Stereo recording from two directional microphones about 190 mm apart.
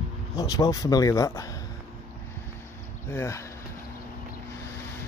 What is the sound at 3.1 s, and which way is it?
Speech, 15° left (ahead or behind).